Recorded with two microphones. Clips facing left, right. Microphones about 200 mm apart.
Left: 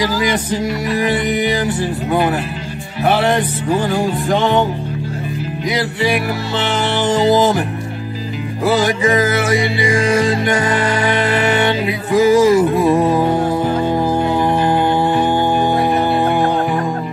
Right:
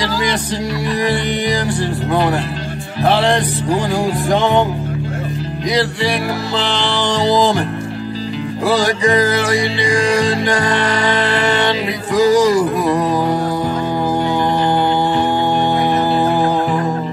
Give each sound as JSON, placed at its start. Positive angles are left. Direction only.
{"t": 1.1, "sound": "music", "side_deg": 0}
{"t": 12.2, "sound": "speech", "side_deg": 25}